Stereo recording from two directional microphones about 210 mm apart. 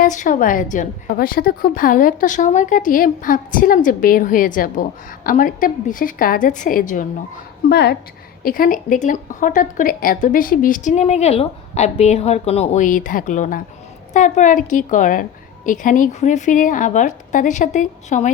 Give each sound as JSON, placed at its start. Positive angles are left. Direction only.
{"t": 0.0, "sound": "a woman's voice", "side_deg": 40}
{"t": 7.7, "sound": "a woman's voice", "side_deg": 50}